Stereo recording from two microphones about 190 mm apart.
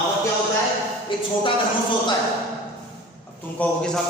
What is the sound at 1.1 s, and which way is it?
Speech, 25° left (ahead or behind).